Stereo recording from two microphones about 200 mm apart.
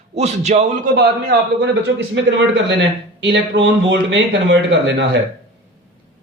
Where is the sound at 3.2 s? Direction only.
60° right (ahead or behind).